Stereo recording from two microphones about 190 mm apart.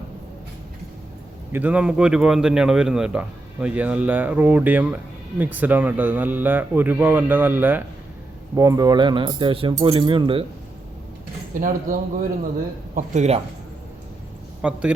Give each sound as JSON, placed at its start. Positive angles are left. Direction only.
{"t": 1.5, "sound": "a man's voice", "side_deg": -5}
{"t": 11.5, "sound": "speech", "side_deg": -40}
{"t": 12.9, "sound": "speech", "side_deg": -40}
{"t": 14.6, "sound": "a man's voice", "side_deg": -5}